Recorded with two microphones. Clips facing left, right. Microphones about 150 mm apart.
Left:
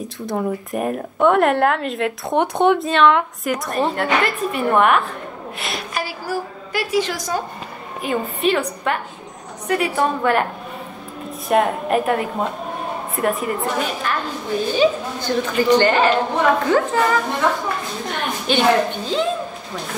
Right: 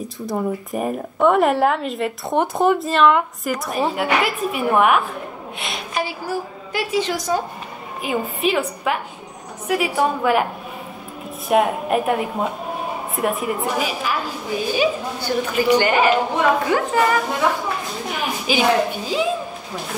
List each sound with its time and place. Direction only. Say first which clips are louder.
0.0 s a woman's voice: even; centre (ahead or behind)
7.1 s a woman's voice: right 2 dB; 10° right (ahead or behind)